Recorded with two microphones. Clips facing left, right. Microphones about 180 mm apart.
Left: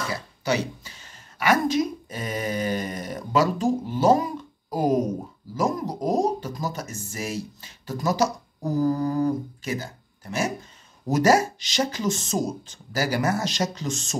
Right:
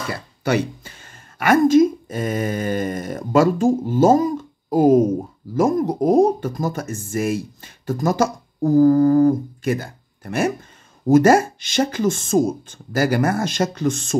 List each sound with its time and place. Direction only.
0.1 s a woman's voice: 55° right (ahead or behind)